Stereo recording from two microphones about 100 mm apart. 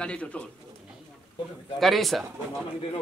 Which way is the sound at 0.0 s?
10° left (ahead or behind).